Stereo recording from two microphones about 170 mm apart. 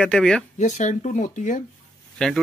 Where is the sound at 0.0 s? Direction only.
5° left (ahead or behind).